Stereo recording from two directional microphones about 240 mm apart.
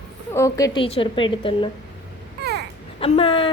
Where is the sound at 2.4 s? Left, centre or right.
Right.